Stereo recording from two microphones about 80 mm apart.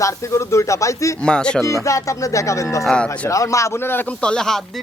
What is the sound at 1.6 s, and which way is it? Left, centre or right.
Speech, left.